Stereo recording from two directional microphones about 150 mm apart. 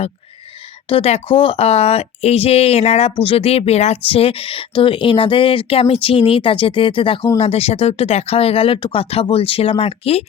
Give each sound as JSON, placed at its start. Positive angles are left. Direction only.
{"t": 0.9, "sound": "speech", "side_deg": 40}